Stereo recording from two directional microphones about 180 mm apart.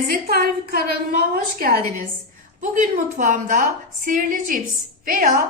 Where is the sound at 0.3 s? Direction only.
50° right (ahead or behind).